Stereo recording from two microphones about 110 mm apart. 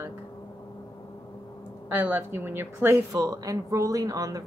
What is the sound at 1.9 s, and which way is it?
A woman's voice, 15° right (ahead or behind).